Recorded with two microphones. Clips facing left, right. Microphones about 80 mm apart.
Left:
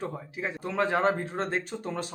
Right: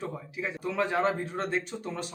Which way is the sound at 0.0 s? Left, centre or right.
Left.